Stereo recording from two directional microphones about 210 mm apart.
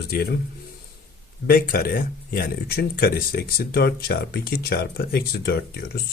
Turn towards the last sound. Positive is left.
turn(degrees=50)  # may be behind; listen again after turning